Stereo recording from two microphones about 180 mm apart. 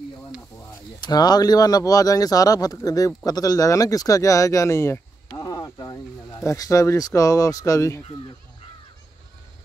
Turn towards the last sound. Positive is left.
turn(degrees=15)  # may be behind; listen again after turning